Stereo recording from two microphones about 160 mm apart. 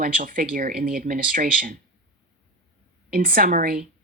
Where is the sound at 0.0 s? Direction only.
60° right (ahead or behind).